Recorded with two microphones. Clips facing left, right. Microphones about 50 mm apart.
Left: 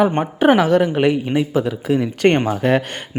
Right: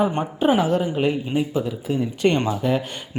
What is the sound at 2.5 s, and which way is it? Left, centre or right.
Speech, left.